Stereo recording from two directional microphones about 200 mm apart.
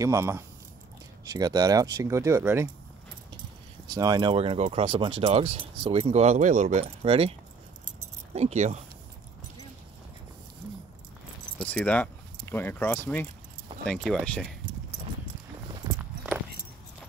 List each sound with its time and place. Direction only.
0.0 s speech: 15° right (ahead or behind)
3.9 s speech: 20° right (ahead or behind)
8.4 s speech: 35° right (ahead or behind)
11.6 s speech: 5° left (ahead or behind)